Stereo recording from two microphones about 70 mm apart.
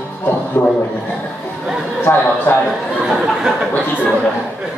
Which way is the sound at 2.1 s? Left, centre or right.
Left.